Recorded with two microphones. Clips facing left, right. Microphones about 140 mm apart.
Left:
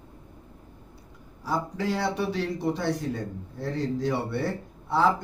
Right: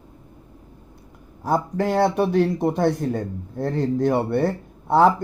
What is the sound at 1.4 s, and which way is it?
Speech, 55° right (ahead or behind).